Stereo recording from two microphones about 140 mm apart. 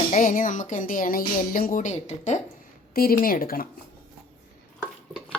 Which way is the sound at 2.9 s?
90° left.